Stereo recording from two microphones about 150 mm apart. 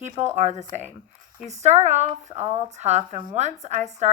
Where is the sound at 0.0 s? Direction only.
50° right (ahead or behind).